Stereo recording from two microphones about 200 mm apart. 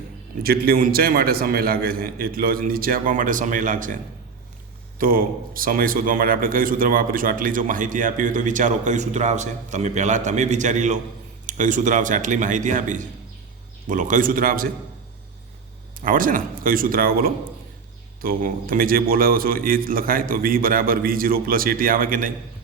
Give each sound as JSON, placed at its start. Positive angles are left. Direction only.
{"t": 0.4, "sound": "a man's voice", "side_deg": -50}
{"t": 4.9, "sound": "a man's voice", "side_deg": -45}
{"t": 16.0, "sound": "a man's voice", "side_deg": -45}